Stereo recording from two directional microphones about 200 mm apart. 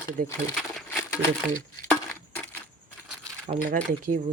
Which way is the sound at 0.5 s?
Centre (ahead or behind).